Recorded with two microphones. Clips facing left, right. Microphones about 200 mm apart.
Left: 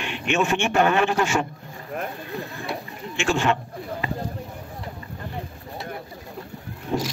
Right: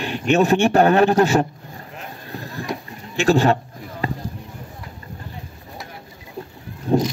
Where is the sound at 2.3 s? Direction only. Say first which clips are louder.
Right 2 dB; 35° right (ahead or behind).